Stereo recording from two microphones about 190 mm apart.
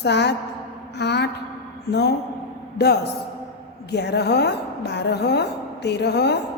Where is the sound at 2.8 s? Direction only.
55° left (ahead or behind).